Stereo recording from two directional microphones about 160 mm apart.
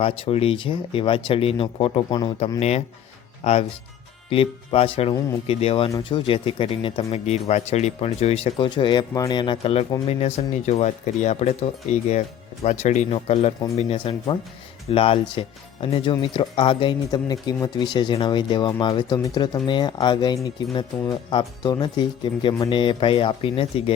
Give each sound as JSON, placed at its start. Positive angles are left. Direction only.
{"t": 0.0, "sound": "speech", "side_deg": 35}
{"t": 2.6, "sound": "speech", "side_deg": 40}